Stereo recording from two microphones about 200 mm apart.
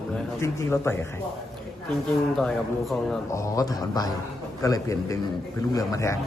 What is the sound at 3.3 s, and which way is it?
A man's voice, 15° left (ahead or behind).